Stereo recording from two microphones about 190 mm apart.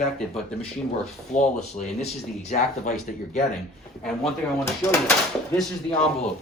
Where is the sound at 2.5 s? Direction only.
40° left (ahead or behind).